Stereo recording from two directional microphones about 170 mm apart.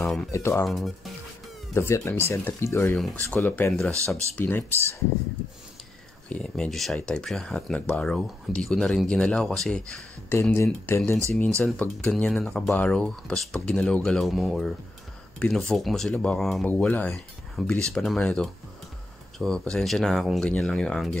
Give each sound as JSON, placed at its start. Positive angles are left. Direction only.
{"t": 0.0, "sound": "a sound", "side_deg": 5}
{"t": 0.3, "sound": "speech", "side_deg": 15}
{"t": 0.7, "sound": "speech", "side_deg": 0}
{"t": 1.7, "sound": "speech", "side_deg": 15}
{"t": 6.2, "sound": "speech", "side_deg": 5}